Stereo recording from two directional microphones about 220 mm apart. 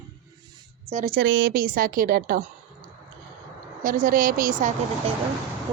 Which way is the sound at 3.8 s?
40° right (ahead or behind).